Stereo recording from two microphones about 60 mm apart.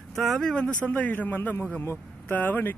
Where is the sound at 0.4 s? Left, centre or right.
Centre.